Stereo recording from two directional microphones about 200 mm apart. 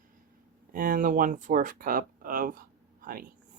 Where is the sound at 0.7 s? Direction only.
45° right (ahead or behind).